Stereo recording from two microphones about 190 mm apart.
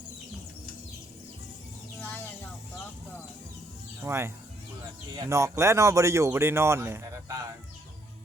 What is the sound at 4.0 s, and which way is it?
Speech, 15° right (ahead or behind).